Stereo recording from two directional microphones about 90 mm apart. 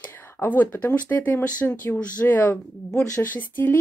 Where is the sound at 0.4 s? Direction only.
20° left (ahead or behind).